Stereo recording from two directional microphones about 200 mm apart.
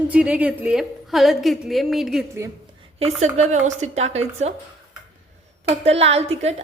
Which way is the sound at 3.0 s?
35° right (ahead or behind).